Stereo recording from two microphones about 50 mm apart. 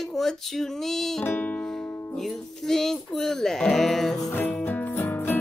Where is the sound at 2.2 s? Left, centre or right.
Centre.